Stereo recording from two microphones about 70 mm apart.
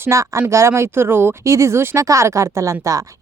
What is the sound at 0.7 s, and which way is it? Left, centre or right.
Speech, right.